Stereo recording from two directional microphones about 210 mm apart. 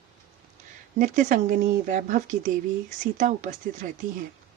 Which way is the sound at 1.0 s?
35° right (ahead or behind).